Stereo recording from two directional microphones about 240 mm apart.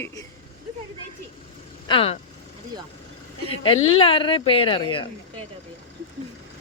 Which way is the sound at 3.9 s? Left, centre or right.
Left.